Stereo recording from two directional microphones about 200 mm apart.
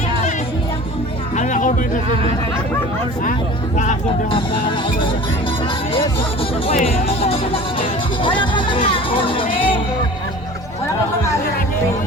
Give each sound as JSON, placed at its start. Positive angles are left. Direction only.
{"t": 1.4, "sound": "a sound", "side_deg": 40}
{"t": 3.8, "sound": "speech", "side_deg": 30}
{"t": 6.7, "sound": "speech", "side_deg": 30}